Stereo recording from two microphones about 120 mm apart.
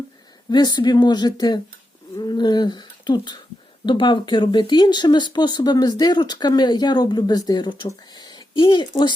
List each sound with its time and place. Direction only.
0.5 s speech: 35° left (ahead or behind)
2.1 s a sound: 35° left (ahead or behind)
3.8 s speech: 40° left (ahead or behind)